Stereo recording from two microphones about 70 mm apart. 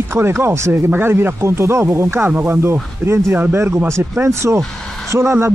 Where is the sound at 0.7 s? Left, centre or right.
Right.